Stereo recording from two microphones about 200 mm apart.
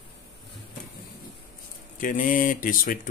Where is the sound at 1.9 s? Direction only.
40° left (ahead or behind).